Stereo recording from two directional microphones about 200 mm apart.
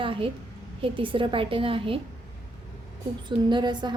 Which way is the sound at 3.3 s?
20° right (ahead or behind).